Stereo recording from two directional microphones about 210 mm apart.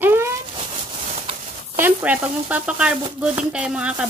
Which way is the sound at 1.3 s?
25° right (ahead or behind).